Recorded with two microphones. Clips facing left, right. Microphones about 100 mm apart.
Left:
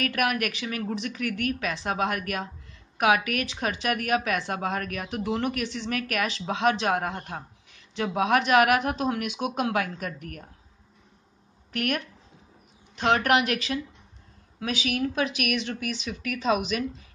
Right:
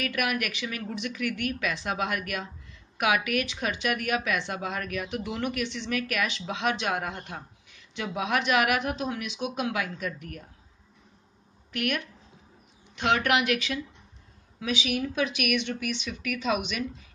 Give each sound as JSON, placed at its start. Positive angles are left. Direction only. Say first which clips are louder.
{"t": 0.0, "sound": "speech", "louder": "left 3 dB", "side_deg": 40}
{"t": 11.7, "sound": "a woman's voice", "louder": "left 1 dB", "side_deg": 40}